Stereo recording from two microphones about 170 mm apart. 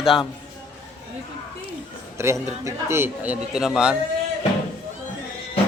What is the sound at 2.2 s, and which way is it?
A man's voice, 15° right (ahead or behind).